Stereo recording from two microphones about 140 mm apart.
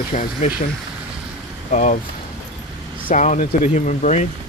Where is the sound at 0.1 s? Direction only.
65° left (ahead or behind).